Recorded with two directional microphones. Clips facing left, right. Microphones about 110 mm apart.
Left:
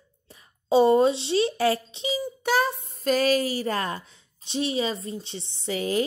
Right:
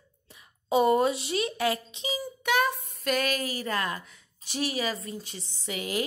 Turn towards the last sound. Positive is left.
turn(degrees=30)  # may be behind; listen again after turning